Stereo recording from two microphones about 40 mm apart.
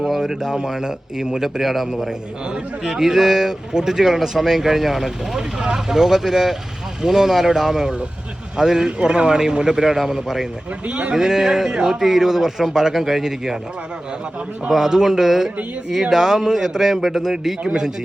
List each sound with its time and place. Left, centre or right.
0.2 s a man's voice: centre
2.0 s a man's voice: centre
10.8 s speech: right
11.1 s a man's voice: centre
14.7 s a man's voice: centre